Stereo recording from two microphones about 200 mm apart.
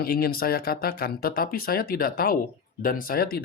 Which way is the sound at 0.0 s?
50° left (ahead or behind).